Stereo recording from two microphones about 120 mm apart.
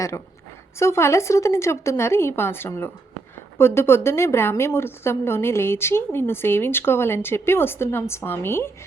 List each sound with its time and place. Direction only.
0.8 s a woman's voice: 20° left (ahead or behind)